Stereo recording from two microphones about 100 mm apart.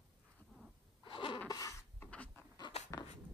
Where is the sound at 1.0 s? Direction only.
55° left (ahead or behind).